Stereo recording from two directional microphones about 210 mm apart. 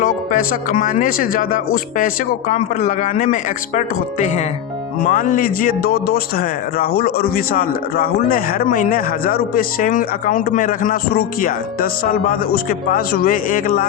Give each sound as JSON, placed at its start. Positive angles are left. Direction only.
{"t": 0.0, "sound": "speech", "side_deg": 40}